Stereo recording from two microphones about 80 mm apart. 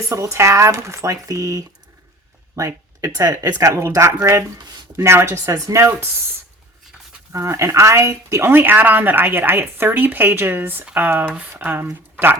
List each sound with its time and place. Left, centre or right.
0.1 s speech: right
7.3 s a woman's voice: right